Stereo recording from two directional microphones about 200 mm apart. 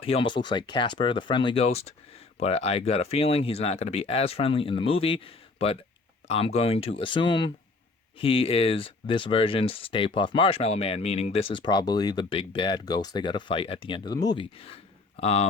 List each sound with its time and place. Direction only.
0.0 s speech: 25° left (ahead or behind)